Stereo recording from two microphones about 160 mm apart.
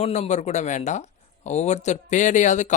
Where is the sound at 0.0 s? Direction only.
45° left (ahead or behind).